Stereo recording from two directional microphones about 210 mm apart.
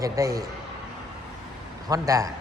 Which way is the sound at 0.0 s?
15° right (ahead or behind).